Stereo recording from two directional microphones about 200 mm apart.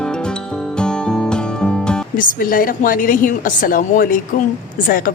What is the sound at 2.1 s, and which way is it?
A woman's voice, 45° left (ahead or behind).